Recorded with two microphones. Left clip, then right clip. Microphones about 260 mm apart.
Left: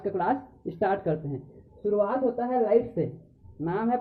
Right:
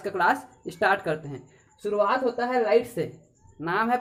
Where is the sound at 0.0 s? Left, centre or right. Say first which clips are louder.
Right 4 dB; centre.